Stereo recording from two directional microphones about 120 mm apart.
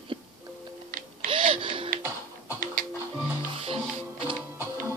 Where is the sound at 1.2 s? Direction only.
50° right (ahead or behind).